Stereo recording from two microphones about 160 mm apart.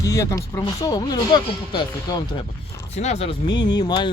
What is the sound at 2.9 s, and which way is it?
Speech, 45° left (ahead or behind).